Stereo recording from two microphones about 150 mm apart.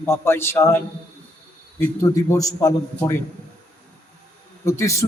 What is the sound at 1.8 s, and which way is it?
Speech, 20° left (ahead or behind).